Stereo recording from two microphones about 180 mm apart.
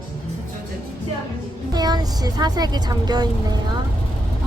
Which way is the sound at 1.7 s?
20° right (ahead or behind).